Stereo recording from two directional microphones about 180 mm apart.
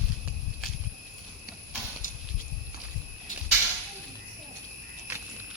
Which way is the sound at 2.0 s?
50° left (ahead or behind).